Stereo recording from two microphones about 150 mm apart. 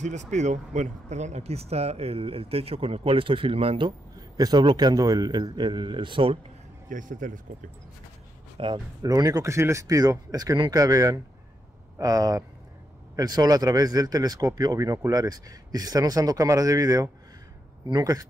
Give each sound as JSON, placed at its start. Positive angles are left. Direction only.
{"t": 0.0, "sound": "speech", "side_deg": -50}
{"t": 6.9, "sound": "speech", "side_deg": -60}
{"t": 8.5, "sound": "speech", "side_deg": -30}